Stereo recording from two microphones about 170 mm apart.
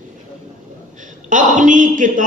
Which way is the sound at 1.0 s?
50° right (ahead or behind).